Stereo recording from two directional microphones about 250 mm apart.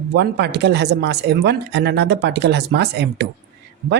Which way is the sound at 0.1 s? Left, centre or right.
Right.